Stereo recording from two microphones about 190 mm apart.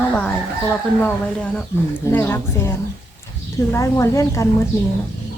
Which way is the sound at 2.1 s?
10° left (ahead or behind).